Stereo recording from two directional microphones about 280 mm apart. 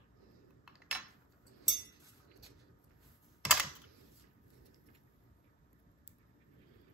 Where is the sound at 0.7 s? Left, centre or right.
Centre.